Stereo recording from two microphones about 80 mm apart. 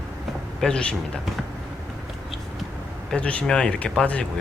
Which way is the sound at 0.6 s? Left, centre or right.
Centre.